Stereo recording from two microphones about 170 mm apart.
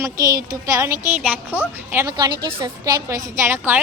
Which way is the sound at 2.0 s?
20° right (ahead or behind).